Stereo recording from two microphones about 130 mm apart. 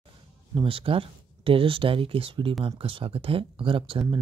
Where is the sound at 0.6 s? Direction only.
45° right (ahead or behind).